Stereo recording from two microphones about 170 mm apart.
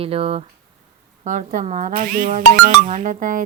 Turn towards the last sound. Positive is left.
turn(degrees=-50)  # may be behind; listen again after turning